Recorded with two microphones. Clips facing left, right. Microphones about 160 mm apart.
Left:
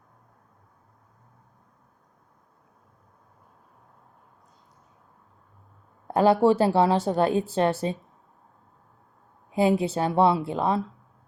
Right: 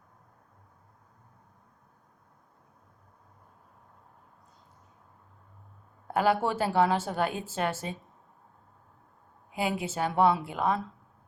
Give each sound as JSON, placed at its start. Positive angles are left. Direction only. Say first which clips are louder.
{"t": 6.1, "sound": "speech", "louder": "left 7 dB", "side_deg": 35}
{"t": 9.5, "sound": "speech", "louder": "left 9 dB", "side_deg": 35}